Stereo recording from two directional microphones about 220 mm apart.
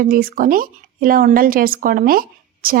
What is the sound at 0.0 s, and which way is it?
A woman's voice, 40° right (ahead or behind).